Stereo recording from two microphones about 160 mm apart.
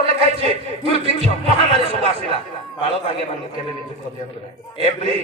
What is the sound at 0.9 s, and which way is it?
A man's voice, 40° right (ahead or behind).